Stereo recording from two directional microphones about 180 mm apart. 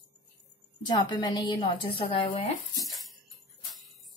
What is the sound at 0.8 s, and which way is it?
A woman's voice, 25° left (ahead or behind).